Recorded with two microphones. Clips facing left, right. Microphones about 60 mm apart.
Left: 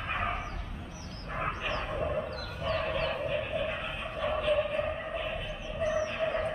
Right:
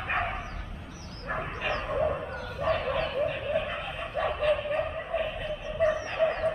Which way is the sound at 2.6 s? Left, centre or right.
Right.